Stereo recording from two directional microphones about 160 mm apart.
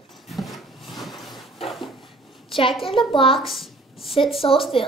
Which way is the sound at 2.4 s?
35° left (ahead or behind).